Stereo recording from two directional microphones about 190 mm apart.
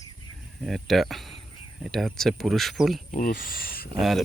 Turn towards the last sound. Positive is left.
turn(degrees=0)  # may be behind; listen again after turning